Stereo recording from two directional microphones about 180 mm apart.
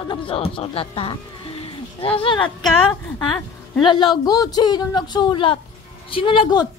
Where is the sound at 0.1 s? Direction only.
30° left (ahead or behind).